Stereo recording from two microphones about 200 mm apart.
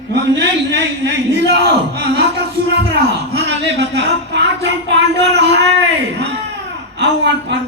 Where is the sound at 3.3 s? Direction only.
60° right (ahead or behind).